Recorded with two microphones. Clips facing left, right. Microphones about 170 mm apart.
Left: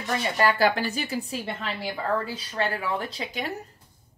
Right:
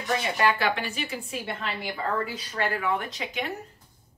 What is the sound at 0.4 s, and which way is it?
Speech, 35° left (ahead or behind).